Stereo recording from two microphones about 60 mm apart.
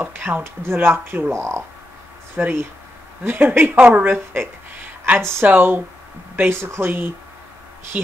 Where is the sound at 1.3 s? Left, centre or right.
Right.